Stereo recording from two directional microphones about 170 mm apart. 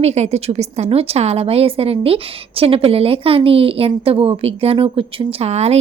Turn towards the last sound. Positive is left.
turn(degrees=-40)  # may be behind; listen again after turning